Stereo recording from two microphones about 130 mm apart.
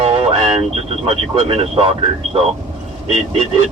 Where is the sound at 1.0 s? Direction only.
45° right (ahead or behind).